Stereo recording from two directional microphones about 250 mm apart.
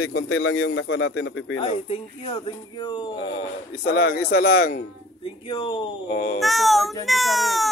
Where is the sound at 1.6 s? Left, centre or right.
Left.